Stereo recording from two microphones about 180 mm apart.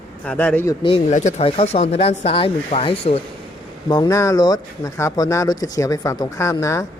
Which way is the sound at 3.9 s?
20° left (ahead or behind).